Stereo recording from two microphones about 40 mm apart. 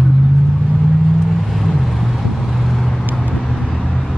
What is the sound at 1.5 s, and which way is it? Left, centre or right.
Vehicle, centre.